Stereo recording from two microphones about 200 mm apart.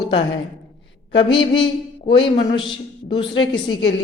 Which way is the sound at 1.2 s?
25° left (ahead or behind).